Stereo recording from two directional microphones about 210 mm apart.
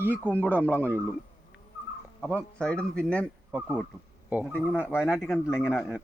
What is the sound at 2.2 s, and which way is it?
A man's voice, 5° left (ahead or behind).